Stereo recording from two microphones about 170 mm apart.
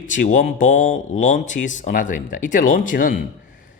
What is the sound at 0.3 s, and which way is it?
Speech, 50° left (ahead or behind).